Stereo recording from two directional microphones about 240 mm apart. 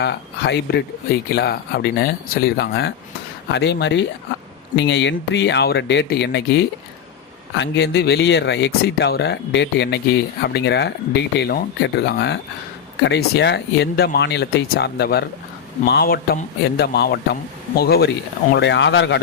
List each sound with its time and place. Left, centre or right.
0.0 s speech: left